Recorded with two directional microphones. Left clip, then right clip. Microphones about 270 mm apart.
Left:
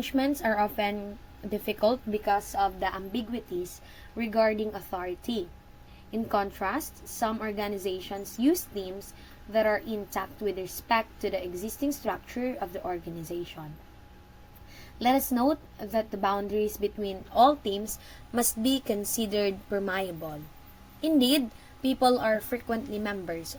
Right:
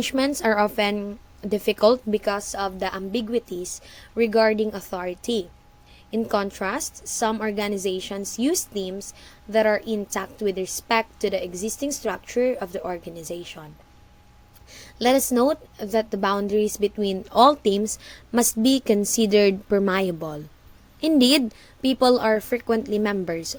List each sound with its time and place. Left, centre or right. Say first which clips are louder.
0.0 s a woman's voice: right 5 dB; right
14.9 s a woman's voice: right 6 dB; right